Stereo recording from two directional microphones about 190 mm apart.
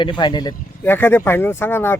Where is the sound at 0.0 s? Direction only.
25° left (ahead or behind).